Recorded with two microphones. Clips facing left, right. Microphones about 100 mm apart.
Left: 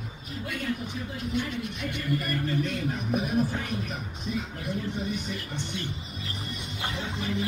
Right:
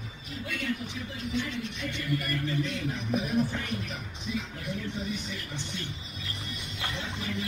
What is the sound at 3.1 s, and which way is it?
Speech, 5° left (ahead or behind).